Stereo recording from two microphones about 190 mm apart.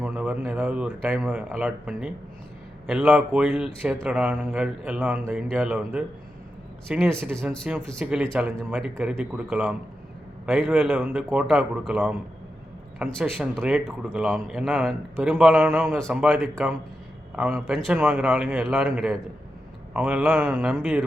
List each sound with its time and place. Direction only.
0.0 s speech: 5° right (ahead or behind)
19.9 s speech: 5° right (ahead or behind)